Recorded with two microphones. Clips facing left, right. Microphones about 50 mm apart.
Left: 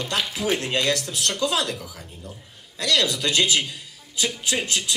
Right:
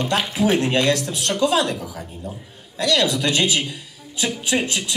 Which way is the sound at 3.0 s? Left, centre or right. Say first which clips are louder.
Right 1 dB; right.